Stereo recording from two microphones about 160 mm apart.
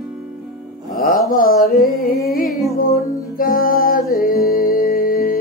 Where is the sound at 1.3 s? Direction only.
60° left (ahead or behind).